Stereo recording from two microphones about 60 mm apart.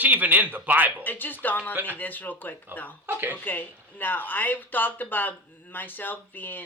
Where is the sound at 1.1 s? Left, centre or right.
Left.